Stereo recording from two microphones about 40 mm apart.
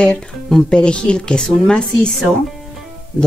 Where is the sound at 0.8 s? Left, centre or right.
Left.